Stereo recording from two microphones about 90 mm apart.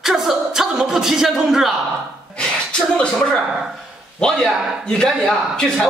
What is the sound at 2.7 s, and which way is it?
A man's voice, 10° left (ahead or behind).